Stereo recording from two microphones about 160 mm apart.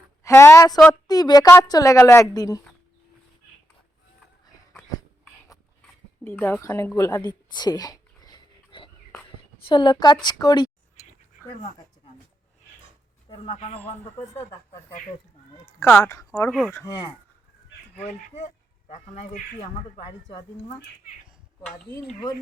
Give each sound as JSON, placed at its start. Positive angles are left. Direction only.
{"t": 0.2, "sound": "a woman's voice", "side_deg": 15}
{"t": 4.7, "sound": "dog", "side_deg": 5}
{"t": 6.2, "sound": "a woman's voice", "side_deg": 10}
{"t": 13.3, "sound": "a woman's voice", "side_deg": 35}
{"t": 14.2, "sound": "a woman's voice", "side_deg": 20}
{"t": 16.5, "sound": "speech", "side_deg": 0}
{"t": 18.0, "sound": "a man's voice", "side_deg": 45}
{"t": 20.2, "sound": "a woman's voice", "side_deg": 25}